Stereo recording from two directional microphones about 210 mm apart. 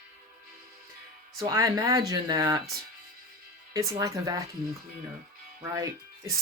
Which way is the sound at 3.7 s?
15° right (ahead or behind).